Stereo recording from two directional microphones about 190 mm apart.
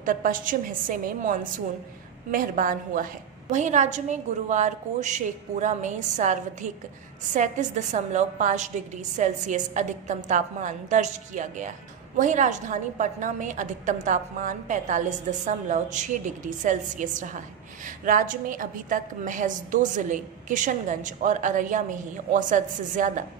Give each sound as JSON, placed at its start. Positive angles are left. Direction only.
{"t": 0.0, "sound": "a woman's voice", "side_deg": -45}